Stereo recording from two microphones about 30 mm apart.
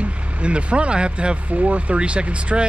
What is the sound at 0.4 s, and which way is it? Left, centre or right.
Speech, right.